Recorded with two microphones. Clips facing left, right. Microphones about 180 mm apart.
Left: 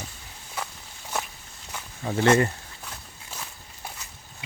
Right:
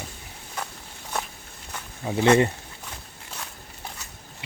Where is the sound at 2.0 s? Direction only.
15° right (ahead or behind).